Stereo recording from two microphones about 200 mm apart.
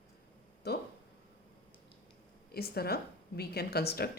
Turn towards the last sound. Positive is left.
turn(degrees=50)  # may be behind; listen again after turning